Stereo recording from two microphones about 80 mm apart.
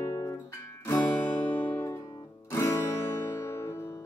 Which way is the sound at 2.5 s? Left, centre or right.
Left.